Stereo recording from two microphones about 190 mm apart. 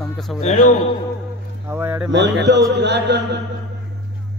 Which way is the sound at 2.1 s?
65° right (ahead or behind).